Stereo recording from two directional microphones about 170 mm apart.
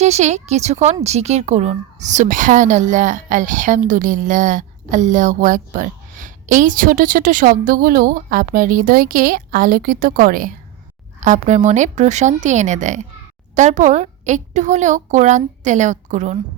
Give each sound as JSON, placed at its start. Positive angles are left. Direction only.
{"t": 0.0, "sound": "speech", "side_deg": -40}
{"t": 11.2, "sound": "speech", "side_deg": -45}